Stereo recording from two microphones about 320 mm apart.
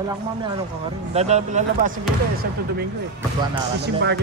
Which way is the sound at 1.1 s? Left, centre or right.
Right.